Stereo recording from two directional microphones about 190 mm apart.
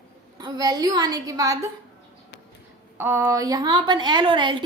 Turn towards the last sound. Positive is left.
turn(degrees=-25)  # may be behind; listen again after turning